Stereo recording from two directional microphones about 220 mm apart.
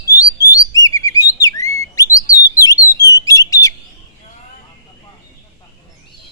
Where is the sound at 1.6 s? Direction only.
15° left (ahead or behind).